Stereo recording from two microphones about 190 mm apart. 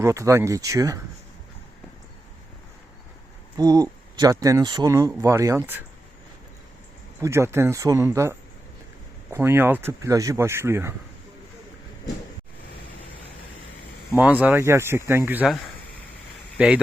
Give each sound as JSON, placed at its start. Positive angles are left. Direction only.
{"t": 0.0, "sound": "speech", "side_deg": -15}
{"t": 3.6, "sound": "speech", "side_deg": -20}
{"t": 7.2, "sound": "speech", "side_deg": -15}
{"t": 14.4, "sound": "speech", "side_deg": -10}
{"t": 16.6, "sound": "speech", "side_deg": -5}